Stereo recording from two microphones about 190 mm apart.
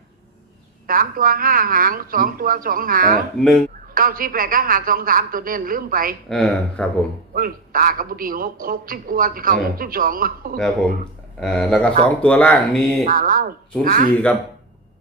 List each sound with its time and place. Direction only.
0.9 s a woman's voice: 45° right (ahead or behind)
3.3 s speech: 5° left (ahead or behind)
3.9 s a woman's voice: 50° right (ahead or behind)
6.2 s speech: centre (ahead or behind)
7.3 s a woman's voice: 50° right (ahead or behind)
11.3 s speech: 5° left (ahead or behind)
13.1 s a woman's voice: 45° right (ahead or behind)